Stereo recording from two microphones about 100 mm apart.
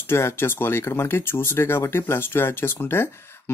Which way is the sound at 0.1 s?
25° left (ahead or behind).